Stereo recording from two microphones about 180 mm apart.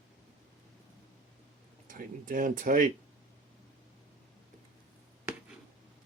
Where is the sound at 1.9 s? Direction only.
50° right (ahead or behind).